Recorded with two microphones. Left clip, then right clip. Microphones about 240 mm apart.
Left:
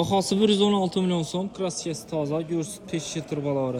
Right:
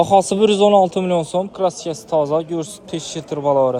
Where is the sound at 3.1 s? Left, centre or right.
Right.